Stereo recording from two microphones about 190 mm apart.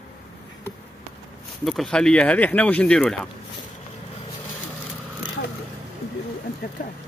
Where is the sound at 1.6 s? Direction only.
Centre (ahead or behind).